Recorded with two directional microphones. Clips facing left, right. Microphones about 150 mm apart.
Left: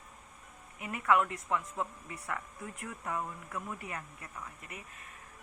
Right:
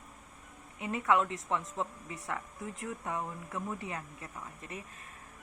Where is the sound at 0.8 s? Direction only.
25° right (ahead or behind).